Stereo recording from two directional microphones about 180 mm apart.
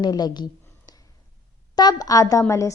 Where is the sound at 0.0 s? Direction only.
20° left (ahead or behind).